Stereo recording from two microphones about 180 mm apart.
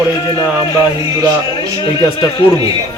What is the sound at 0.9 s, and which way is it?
Speech, 25° left (ahead or behind).